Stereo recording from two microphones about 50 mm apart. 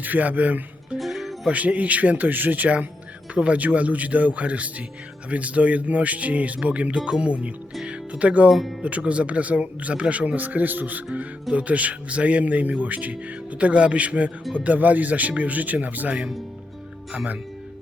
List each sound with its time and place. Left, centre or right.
0.0 s speech: right
0.9 s music: centre
1.5 s speech: right
7.9 s music: right
8.4 s speech: centre
8.8 s speech: right